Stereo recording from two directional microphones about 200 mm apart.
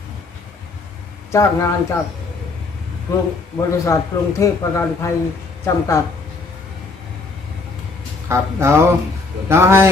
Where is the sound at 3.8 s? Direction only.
15° left (ahead or behind).